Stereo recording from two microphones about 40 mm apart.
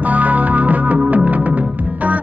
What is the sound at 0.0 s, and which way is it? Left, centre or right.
Music, right.